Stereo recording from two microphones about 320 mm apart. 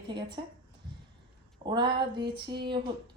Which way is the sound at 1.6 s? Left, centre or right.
Centre.